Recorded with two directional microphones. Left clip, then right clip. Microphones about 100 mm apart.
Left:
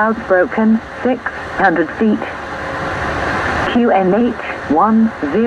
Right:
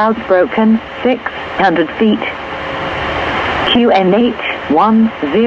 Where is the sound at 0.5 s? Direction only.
25° right (ahead or behind).